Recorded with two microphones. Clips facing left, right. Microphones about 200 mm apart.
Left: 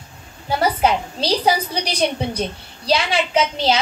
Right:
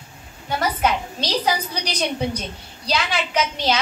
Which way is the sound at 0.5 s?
30° left (ahead or behind).